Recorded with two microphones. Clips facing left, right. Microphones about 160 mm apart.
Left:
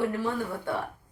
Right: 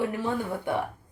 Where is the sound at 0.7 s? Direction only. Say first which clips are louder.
Right 4 dB; 15° right (ahead or behind).